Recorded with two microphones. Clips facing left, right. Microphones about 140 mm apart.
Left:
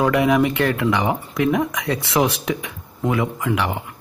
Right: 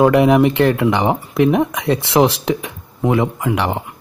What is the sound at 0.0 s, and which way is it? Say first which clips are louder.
Speech: right 5 dB; 30° right (ahead or behind).